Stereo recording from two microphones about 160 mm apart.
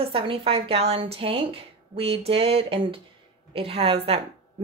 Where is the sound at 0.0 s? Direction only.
35° right (ahead or behind).